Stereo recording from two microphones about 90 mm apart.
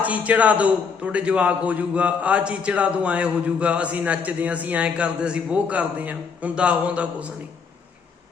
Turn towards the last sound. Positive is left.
turn(degrees=-15)  # may be behind; listen again after turning